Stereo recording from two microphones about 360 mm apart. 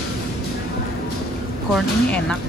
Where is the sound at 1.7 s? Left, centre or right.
Centre.